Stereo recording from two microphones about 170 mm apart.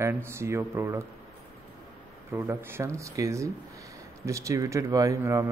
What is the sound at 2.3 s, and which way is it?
Speech, 15° right (ahead or behind).